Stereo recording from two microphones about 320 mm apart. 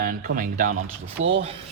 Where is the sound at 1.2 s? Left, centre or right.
Right.